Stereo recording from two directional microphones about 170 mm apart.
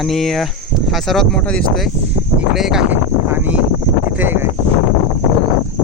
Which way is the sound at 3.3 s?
10° right (ahead or behind).